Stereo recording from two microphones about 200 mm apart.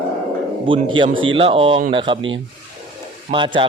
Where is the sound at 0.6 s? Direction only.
25° right (ahead or behind).